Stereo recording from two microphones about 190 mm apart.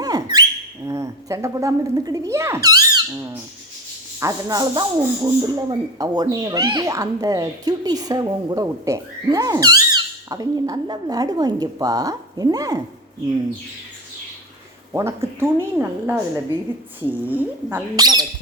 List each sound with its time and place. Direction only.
0.0 s bird: 20° right (ahead or behind)
0.9 s speech: 15° right (ahead or behind)
14.9 s speech: 15° right (ahead or behind)
17.9 s speech: 20° right (ahead or behind)